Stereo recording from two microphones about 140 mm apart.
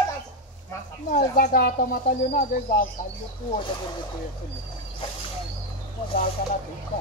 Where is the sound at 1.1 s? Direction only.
70° left (ahead or behind); by 2.8 s 90° left.